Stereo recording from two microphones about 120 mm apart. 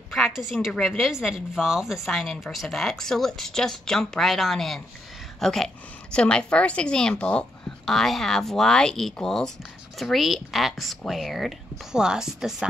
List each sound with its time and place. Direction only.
0.1 s a woman's voice: centre (ahead or behind)